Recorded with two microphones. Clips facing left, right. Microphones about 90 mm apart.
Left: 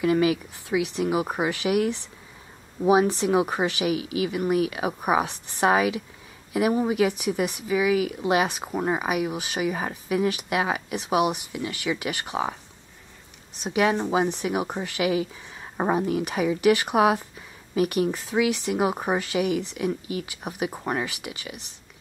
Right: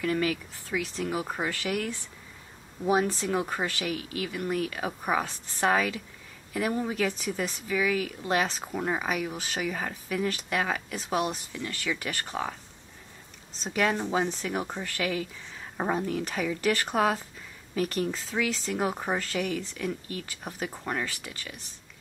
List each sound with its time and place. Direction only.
0.0 s speech: 15° left (ahead or behind)
13.7 s speech: 10° left (ahead or behind)